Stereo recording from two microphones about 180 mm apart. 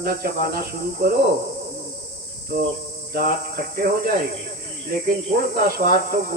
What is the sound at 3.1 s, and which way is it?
Speech, 55° right (ahead or behind).